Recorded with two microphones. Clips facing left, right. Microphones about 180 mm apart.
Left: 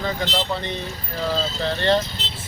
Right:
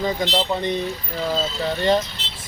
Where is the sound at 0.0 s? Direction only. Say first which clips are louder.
Right 3 dB; 15° right (ahead or behind).